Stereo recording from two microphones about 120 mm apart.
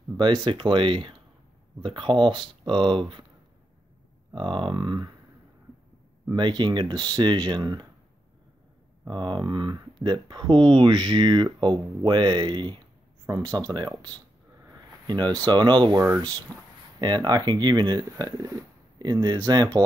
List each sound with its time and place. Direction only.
0.2 s speech: 40° right (ahead or behind)
4.4 s speech: 45° right (ahead or behind)
6.2 s speech: 40° right (ahead or behind)
9.0 s speech: 40° right (ahead or behind)